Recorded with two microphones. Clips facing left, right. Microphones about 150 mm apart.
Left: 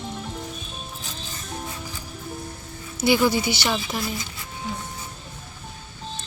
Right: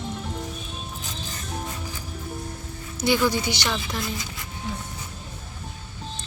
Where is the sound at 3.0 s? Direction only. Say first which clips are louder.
Left 2 dB; 10° left (ahead or behind).